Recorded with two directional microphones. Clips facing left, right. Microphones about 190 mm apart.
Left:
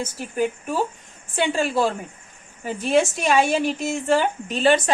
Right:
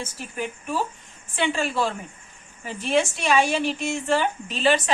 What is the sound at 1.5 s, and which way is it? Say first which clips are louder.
A woman's voice: left 4 dB; 40° left (ahead or behind).